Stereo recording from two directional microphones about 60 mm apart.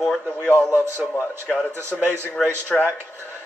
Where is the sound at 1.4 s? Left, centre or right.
Left.